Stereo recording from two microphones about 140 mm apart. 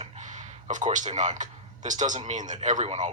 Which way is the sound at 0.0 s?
60° right (ahead or behind).